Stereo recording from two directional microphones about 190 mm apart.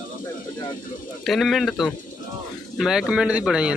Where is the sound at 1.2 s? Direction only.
Centre (ahead or behind).